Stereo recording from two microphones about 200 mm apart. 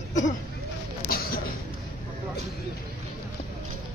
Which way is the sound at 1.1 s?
45° left (ahead or behind).